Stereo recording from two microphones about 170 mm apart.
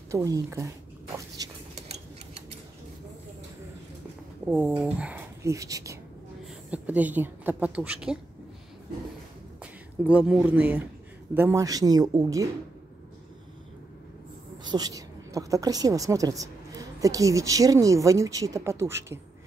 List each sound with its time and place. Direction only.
0.1 s speech: 20° right (ahead or behind)
1.4 s a sound: 20° right (ahead or behind)
1.8 s tick-tock: 40° right (ahead or behind)
4.5 s speech: 10° right (ahead or behind)
6.7 s speech: 10° right (ahead or behind)
10.0 s speech: 5° right (ahead or behind)
14.6 s a woman's voice: 25° right (ahead or behind)